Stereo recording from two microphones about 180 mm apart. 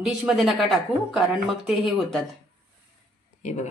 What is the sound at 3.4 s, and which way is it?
Speech, 40° left (ahead or behind).